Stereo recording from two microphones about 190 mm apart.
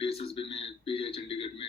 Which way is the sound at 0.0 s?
30° left (ahead or behind).